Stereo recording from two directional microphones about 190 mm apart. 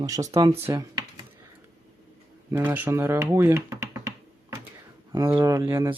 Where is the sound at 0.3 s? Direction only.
15° right (ahead or behind).